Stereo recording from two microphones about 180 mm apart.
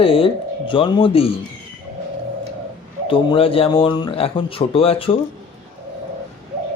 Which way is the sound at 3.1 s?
30° left (ahead or behind).